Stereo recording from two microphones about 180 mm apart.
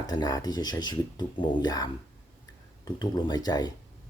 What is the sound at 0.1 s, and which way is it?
Speech, 20° left (ahead or behind).